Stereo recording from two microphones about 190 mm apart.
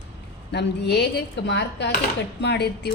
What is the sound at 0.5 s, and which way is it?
A woman's voice, 60° left (ahead or behind).